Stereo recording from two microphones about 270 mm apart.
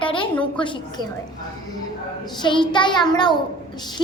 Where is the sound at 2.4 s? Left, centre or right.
Centre.